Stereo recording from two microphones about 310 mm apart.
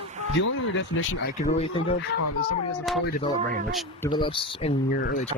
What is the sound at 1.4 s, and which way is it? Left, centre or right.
Speech, centre.